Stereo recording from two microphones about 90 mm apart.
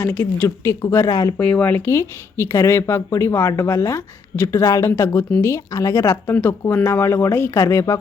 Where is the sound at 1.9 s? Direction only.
30° left (ahead or behind).